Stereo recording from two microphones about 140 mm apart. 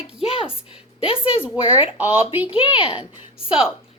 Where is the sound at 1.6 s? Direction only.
40° left (ahead or behind).